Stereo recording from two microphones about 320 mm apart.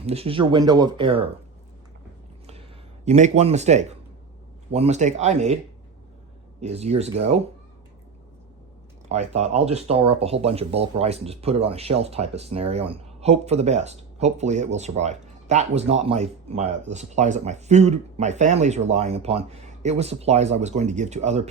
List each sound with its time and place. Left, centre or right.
0.0 s speech: centre
2.5 s a sound: centre
4.7 s speech: right
6.6 s speech: centre
9.0 s speech: right